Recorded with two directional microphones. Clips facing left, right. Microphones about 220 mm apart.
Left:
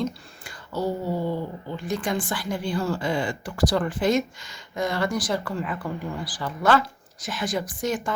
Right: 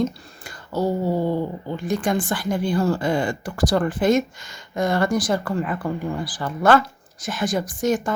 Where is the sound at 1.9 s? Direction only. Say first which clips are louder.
Right 5 dB; 50° right (ahead or behind).